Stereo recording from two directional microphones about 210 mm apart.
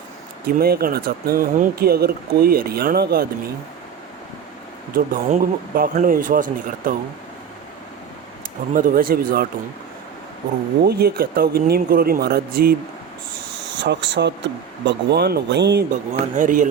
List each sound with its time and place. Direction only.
0.4 s speech: 45° right (ahead or behind)
4.9 s a man's voice: 45° right (ahead or behind)
8.7 s speech: 40° right (ahead or behind)
10.8 s speech: 45° right (ahead or behind)
13.7 s speech: 55° right (ahead or behind)
15.9 s a man's voice: 40° right (ahead or behind)